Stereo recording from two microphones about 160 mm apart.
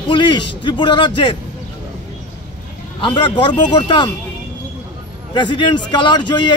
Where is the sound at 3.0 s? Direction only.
30° left (ahead or behind).